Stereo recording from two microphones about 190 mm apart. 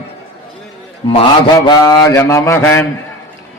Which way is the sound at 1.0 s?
25° left (ahead or behind).